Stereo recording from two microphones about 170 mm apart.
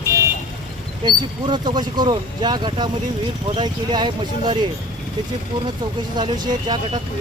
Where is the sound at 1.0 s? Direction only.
25° right (ahead or behind).